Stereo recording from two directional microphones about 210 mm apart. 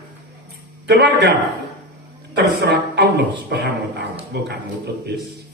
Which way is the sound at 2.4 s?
50° right (ahead or behind).